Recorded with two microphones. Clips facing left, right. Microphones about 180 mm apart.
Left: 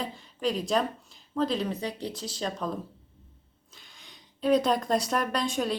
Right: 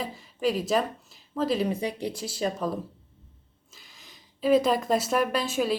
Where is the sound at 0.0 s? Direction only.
5° right (ahead or behind).